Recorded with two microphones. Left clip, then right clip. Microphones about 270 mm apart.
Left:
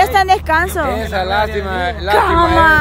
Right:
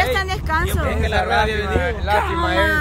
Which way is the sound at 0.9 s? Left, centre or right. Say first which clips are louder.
Left 2 dB; left.